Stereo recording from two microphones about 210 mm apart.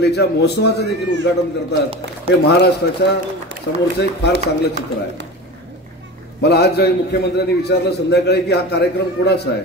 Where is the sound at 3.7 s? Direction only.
65° left (ahead or behind).